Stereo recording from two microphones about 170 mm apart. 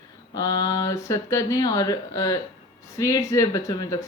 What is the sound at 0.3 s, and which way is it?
A woman's voice, 20° left (ahead or behind).